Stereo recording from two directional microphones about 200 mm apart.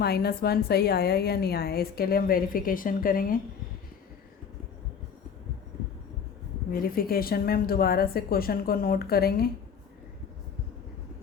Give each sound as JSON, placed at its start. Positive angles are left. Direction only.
{"t": 0.0, "sound": "a woman's voice", "side_deg": 50}
{"t": 6.7, "sound": "a woman's voice", "side_deg": 45}